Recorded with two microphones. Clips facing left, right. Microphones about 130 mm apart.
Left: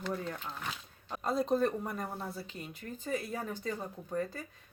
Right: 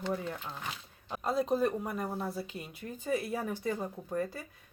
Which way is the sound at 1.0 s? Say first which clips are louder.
Right 1 dB; centre (ahead or behind).